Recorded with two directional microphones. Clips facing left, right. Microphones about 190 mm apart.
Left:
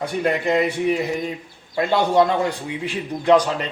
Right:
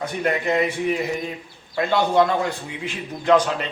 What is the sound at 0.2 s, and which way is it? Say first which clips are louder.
Speech: left 2 dB; 20° left (ahead or behind).